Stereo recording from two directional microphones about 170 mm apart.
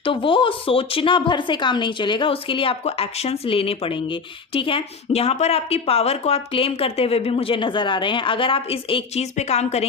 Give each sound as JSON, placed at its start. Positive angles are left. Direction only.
{"t": 0.0, "sound": "speech", "side_deg": 30}